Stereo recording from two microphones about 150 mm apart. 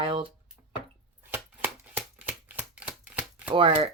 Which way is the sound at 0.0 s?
35° right (ahead or behind).